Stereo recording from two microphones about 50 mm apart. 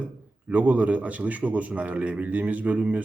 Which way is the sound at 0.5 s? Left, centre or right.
Right.